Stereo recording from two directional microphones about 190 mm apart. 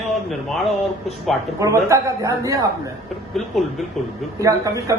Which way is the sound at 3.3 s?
Centre (ahead or behind).